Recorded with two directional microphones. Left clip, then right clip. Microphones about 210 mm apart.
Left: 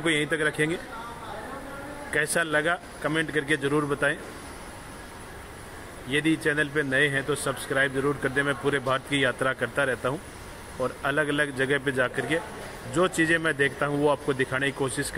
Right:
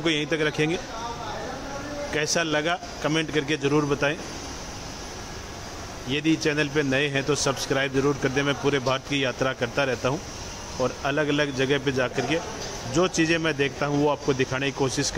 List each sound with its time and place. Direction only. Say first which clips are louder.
0.0 s a man's voice: right 1 dB; 10° right (ahead or behind)
2.1 s a man's voice: even; 5° right (ahead or behind)
6.0 s a man's voice: right 1 dB; 10° right (ahead or behind)